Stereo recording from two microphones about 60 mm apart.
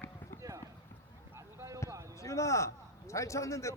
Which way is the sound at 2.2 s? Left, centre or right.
Left.